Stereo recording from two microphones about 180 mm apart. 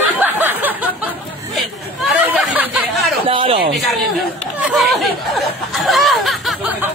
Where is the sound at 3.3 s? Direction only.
30° right (ahead or behind).